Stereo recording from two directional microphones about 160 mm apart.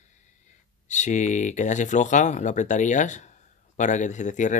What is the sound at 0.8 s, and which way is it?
Speech, 50° left (ahead or behind).